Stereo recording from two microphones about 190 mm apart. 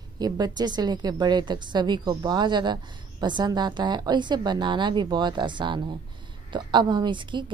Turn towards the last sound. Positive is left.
turn(degrees=-25)  # may be behind; listen again after turning